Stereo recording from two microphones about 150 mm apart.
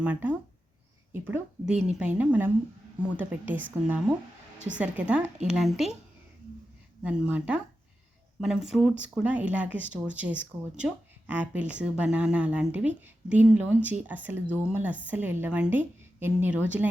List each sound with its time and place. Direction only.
0.0 s speech: 10° right (ahead or behind)
7.0 s speech: 10° right (ahead or behind)